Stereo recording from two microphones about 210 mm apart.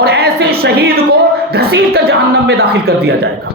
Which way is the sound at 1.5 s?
50° right (ahead or behind).